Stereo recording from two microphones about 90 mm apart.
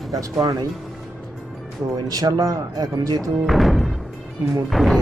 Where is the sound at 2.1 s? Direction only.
45° right (ahead or behind).